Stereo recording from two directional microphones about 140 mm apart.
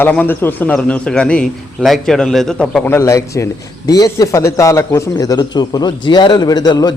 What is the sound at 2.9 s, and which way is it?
A man's voice, 20° left (ahead or behind).